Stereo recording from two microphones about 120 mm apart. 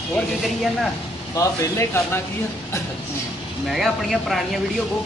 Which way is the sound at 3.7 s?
Centre (ahead or behind).